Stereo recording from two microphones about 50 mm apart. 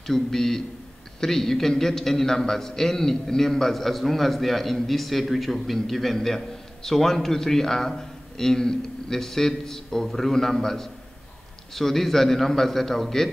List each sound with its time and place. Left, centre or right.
0.0 s a man's voice: centre